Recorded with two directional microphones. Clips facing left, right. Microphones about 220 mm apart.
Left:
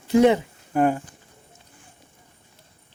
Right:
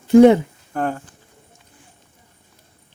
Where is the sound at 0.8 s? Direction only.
10° left (ahead or behind).